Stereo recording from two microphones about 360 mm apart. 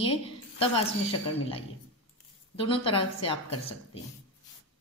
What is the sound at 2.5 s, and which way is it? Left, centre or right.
A woman's voice, centre.